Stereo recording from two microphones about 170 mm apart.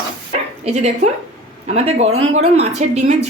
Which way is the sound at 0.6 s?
40° right (ahead or behind).